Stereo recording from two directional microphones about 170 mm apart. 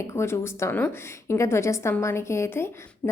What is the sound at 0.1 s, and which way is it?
A woman's voice, 15° left (ahead or behind).